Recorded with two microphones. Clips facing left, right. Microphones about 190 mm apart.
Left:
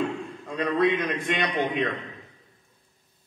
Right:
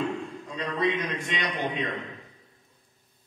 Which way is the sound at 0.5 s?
55° left (ahead or behind).